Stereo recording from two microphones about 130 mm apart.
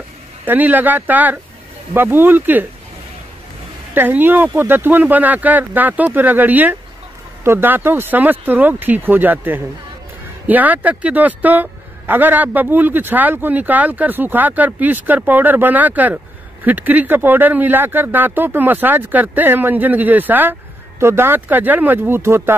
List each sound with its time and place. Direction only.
0.5 s a man's voice: 15° right (ahead or behind)
3.9 s a man's voice: 15° right (ahead or behind)